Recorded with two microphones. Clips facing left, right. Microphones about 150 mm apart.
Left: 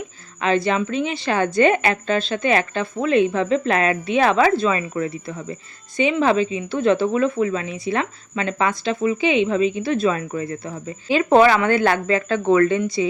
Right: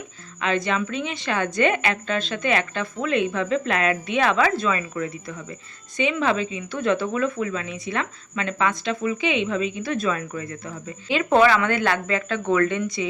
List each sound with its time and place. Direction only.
0.3 s speech: 35° left (ahead or behind)